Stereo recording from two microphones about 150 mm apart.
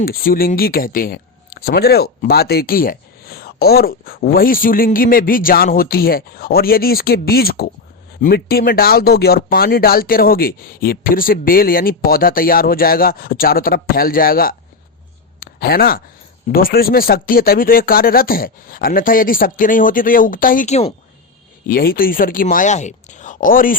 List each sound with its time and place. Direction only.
0.0 s speech: 75° left (ahead or behind)
15.4 s speech: 90° left; by 20.9 s 45° left (ahead or behind)
21.7 s speech: 80° left